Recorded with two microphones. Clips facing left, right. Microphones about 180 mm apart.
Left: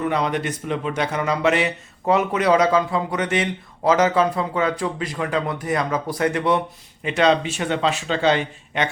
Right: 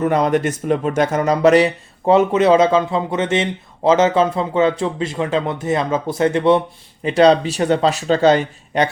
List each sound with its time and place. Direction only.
0.0 s speech: 45° right (ahead or behind)